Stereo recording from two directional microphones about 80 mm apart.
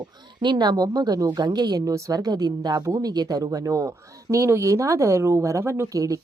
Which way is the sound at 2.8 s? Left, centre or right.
Right.